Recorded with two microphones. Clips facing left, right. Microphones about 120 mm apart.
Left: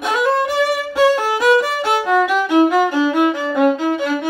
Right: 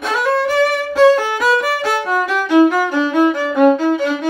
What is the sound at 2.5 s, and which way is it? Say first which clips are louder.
Music: right 3 dB; 15° left (ahead or behind).